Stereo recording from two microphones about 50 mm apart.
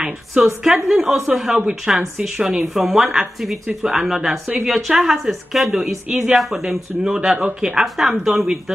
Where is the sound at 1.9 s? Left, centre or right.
Centre.